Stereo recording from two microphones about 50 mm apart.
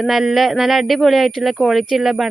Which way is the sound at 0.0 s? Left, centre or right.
Centre.